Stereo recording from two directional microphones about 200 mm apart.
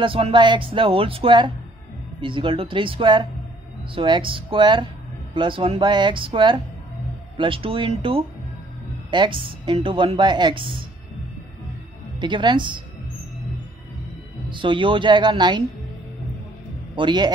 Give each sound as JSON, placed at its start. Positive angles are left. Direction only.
{"t": 0.0, "sound": "a woman's voice", "side_deg": -25}
{"t": 12.2, "sound": "a woman's voice", "side_deg": -25}
{"t": 14.5, "sound": "a woman's voice", "side_deg": -25}
{"t": 16.9, "sound": "a woman's voice", "side_deg": -25}